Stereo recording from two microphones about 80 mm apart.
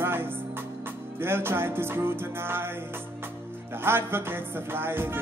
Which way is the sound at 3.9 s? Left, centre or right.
Right.